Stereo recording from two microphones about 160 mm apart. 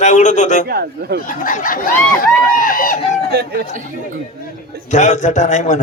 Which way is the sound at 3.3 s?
80° right.